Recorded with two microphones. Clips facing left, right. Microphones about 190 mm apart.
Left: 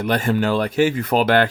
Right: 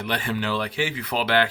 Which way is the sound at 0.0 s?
45° left (ahead or behind).